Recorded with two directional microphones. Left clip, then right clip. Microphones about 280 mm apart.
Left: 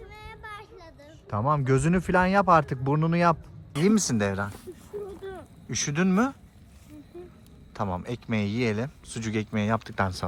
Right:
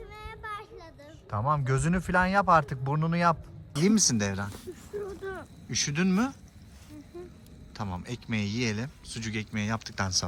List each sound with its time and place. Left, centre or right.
0.0 s a sound: centre
1.6 s a man's voice: centre
2.8 s speech: right
3.1 s a man's voice: centre
4.9 s a sound: centre
7.7 s a man's voice: centre